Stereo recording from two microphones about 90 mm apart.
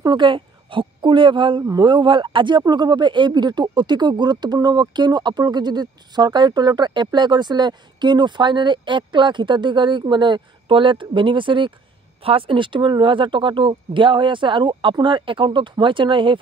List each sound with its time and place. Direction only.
0.0 s a woman's voice: 60° right (ahead or behind)
12.2 s speech: 90° right; by 16.3 s 65° right (ahead or behind)